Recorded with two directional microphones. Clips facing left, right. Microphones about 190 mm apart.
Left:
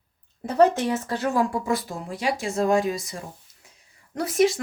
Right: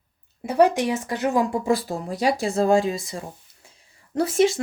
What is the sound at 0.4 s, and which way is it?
Speech, 10° right (ahead or behind).